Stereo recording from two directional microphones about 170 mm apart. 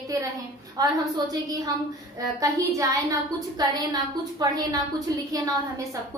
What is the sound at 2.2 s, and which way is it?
A woman's voice, 20° right (ahead or behind).